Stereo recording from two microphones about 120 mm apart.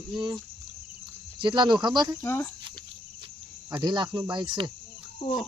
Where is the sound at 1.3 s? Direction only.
40° right (ahead or behind).